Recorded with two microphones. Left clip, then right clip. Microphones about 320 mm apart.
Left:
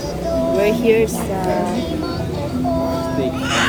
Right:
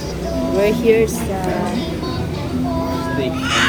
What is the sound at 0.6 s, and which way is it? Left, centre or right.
Speech, centre.